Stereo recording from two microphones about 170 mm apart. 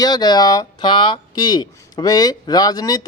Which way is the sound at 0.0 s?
25° left (ahead or behind).